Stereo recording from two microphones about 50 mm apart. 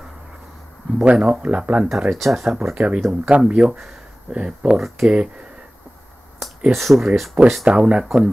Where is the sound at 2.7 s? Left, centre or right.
Right.